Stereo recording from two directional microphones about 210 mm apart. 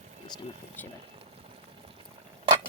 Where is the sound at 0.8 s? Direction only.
10° left (ahead or behind).